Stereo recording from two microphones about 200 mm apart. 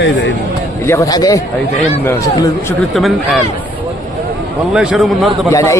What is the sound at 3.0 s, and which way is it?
Speech, centre (ahead or behind).